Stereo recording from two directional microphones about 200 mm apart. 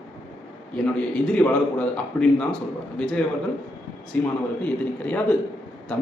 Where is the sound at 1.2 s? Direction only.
5° left (ahead or behind).